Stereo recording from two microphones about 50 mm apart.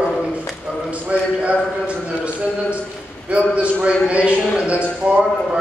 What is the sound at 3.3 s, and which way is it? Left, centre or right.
A man's voice, right.